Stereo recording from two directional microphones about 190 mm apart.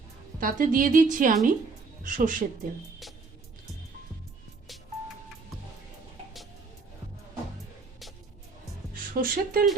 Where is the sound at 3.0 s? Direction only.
Centre (ahead or behind).